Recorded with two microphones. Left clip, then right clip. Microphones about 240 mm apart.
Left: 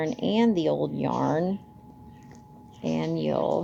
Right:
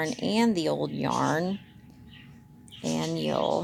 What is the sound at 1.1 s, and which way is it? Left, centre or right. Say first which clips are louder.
Speech: right 1 dB; right.